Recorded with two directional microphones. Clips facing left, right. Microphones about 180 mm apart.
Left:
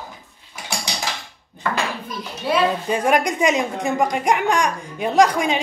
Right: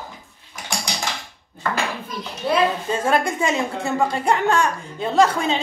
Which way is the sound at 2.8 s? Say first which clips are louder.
Left 2 dB; 15° left (ahead or behind).